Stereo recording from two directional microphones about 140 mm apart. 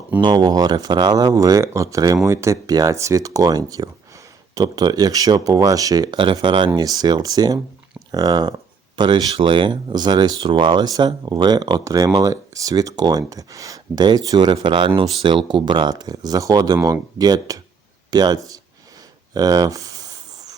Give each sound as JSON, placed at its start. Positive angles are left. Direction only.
{"t": 0.2, "sound": "speech", "side_deg": -30}